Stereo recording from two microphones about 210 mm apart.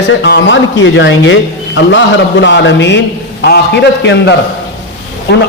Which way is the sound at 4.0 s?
55° left (ahead or behind).